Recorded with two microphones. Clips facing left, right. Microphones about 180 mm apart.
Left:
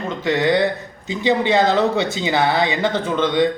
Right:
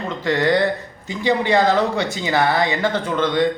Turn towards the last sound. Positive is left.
turn(degrees=20)  # may be behind; listen again after turning